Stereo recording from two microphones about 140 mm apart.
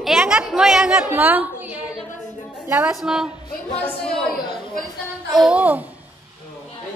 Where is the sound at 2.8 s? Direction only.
5° right (ahead or behind).